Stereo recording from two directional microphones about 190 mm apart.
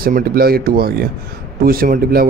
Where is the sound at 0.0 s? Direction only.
50° right (ahead or behind).